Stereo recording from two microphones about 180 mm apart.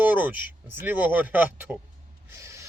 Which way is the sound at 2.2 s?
15° right (ahead or behind).